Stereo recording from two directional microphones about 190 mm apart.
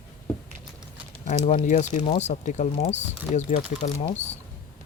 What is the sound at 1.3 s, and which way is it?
Speech, 35° left (ahead or behind).